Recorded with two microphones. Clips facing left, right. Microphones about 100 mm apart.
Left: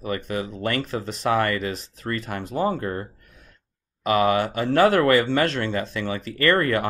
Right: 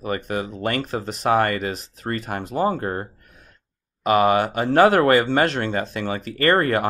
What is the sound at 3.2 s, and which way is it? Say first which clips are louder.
Gasp: right 2 dB; 55° right (ahead or behind).